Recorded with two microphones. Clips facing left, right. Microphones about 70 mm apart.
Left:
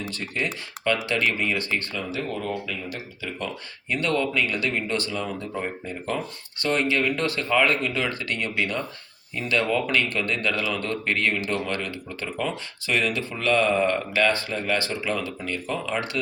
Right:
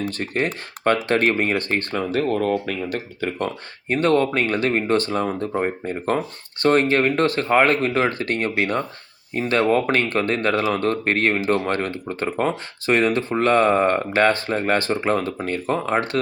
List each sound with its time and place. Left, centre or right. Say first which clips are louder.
0.1 s speech: right 5 dB; right